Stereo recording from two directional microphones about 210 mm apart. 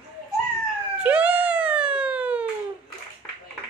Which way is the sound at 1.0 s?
5° right (ahead or behind).